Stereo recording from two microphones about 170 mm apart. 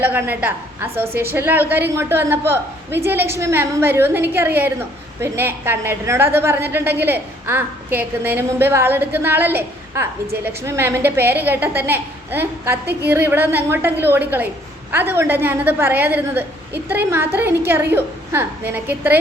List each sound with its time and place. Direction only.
0.0 s a woman's voice: 10° right (ahead or behind)
12.8 s a woman's voice: 70° right (ahead or behind)
13.1 s a woman's voice: 10° right (ahead or behind)